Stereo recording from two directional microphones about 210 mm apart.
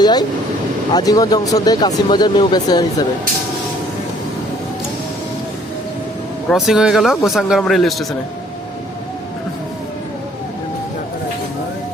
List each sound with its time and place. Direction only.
0.0 s speech: 20° left (ahead or behind)
6.5 s speech: centre (ahead or behind)